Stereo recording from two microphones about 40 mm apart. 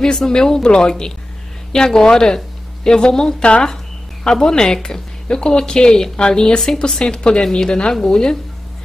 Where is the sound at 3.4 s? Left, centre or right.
Left.